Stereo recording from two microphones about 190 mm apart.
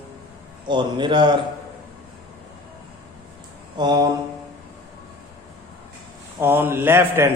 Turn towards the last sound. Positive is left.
turn(degrees=-15)  # may be behind; listen again after turning